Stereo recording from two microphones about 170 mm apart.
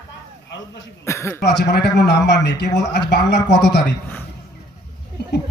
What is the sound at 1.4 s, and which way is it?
A man's voice, 85° left.